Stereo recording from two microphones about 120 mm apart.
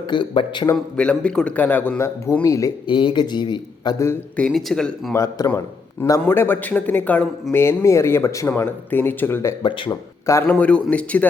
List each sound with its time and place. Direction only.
0.1 s speech: 40° left (ahead or behind)
0.9 s speech: 10° left (ahead or behind); by 2.7 s 30° left (ahead or behind)
2.8 s speech: 45° left (ahead or behind)
3.9 s speech: 20° left (ahead or behind)
4.4 s speech: 5° left (ahead or behind)
5.1 s speech: 30° left (ahead or behind)
9.6 s speech: 45° left (ahead or behind)
10.5 s speech: 10° left (ahead or behind)